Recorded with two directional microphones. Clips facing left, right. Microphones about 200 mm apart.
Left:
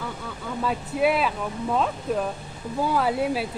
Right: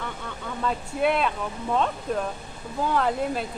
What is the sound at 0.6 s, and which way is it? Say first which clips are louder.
Speech: left 2 dB; 5° left (ahead or behind).